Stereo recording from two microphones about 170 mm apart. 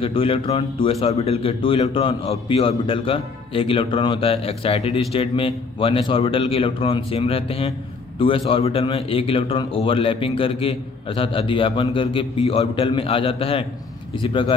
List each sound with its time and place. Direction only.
0.0 s a man's voice: 30° left (ahead or behind)